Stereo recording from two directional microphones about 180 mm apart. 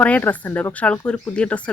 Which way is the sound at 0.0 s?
10° left (ahead or behind).